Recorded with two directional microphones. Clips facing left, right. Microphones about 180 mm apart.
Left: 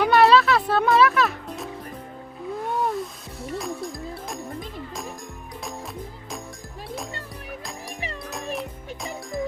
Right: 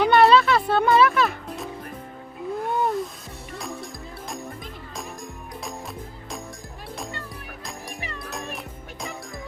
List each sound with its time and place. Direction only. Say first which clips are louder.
0.0 s music: even; centre (ahead or behind)
8.5 s music: left 5 dB; centre (ahead or behind)